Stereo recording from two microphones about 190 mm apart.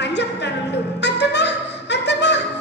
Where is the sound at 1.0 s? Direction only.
65° left (ahead or behind).